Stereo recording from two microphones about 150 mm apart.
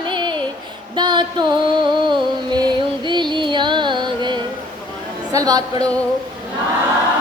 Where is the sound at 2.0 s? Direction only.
30° right (ahead or behind).